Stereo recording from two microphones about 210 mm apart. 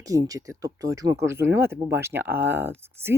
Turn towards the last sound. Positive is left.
turn(degrees=-10)  # may be behind; listen again after turning